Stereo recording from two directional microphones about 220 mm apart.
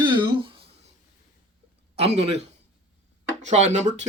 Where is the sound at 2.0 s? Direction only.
25° right (ahead or behind).